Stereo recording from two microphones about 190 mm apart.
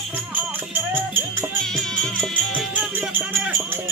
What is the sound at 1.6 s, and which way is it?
Music, 5° left (ahead or behind).